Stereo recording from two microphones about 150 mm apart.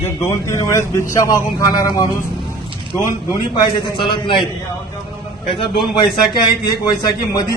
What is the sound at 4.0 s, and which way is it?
Speech, 35° left (ahead or behind).